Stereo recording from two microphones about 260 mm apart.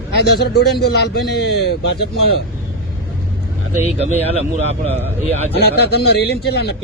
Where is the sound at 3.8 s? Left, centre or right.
Right.